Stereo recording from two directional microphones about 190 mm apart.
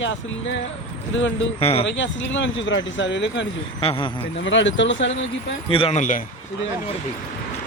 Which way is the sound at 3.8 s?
30° left (ahead or behind).